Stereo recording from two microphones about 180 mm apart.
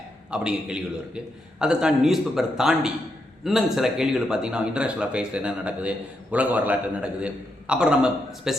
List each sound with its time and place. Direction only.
0.3 s a man's voice: 5° right (ahead or behind)